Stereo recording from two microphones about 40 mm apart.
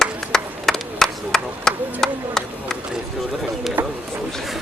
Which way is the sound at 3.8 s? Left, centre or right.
Right.